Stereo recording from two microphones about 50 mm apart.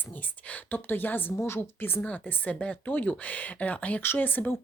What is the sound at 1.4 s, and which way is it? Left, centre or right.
Speech, left.